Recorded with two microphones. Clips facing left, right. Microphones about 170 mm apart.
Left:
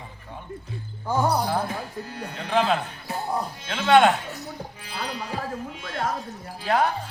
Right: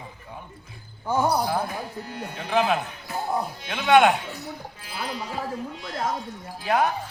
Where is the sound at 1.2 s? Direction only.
10° right (ahead or behind).